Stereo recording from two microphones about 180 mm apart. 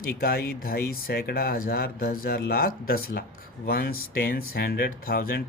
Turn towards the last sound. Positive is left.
turn(degrees=55)  # may be behind; listen again after turning